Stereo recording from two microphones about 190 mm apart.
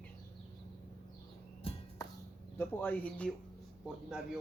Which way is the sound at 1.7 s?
30° left (ahead or behind).